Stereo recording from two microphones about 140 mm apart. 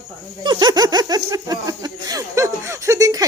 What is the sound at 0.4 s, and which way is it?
Speech, 30° right (ahead or behind).